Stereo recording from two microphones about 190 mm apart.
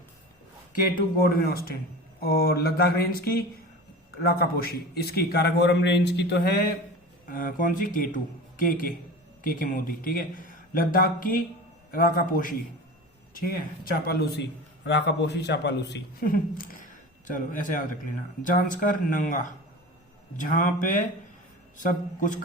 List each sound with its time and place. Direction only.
0.7 s a man's voice: 50° left (ahead or behind)
7.3 s a man's voice: 45° left (ahead or behind)
14.0 s a man's voice: 55° left (ahead or behind)